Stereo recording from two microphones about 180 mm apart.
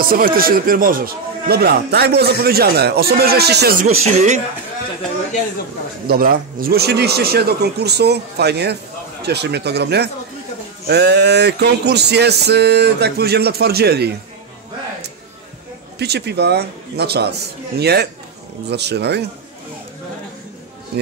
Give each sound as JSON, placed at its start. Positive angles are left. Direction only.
{"t": 0.0, "sound": "speech", "side_deg": -55}
{"t": 3.8, "sound": "speech", "side_deg": -40}
{"t": 6.0, "sound": "speech", "side_deg": -55}
{"t": 16.0, "sound": "speech", "side_deg": -65}